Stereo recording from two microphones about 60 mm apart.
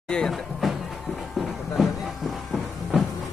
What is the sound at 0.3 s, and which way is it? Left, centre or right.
Speech, centre.